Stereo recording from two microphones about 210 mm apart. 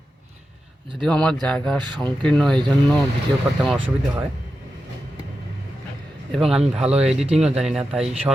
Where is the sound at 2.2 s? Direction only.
5° left (ahead or behind).